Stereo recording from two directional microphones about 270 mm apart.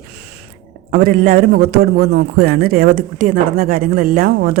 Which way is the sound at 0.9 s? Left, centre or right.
Right.